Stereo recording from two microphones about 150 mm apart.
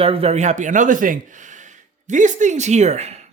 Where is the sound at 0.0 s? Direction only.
40° right (ahead or behind).